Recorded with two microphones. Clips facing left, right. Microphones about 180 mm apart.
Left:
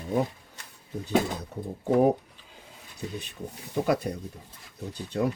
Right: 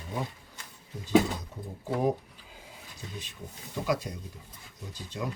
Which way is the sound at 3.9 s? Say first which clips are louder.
Left 3 dB; 60° left (ahead or behind).